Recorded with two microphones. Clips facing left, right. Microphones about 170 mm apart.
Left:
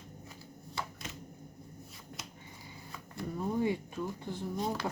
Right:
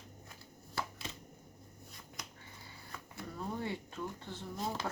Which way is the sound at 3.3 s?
15° left (ahead or behind).